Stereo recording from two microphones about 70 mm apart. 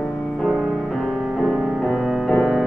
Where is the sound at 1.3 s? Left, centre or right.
Centre.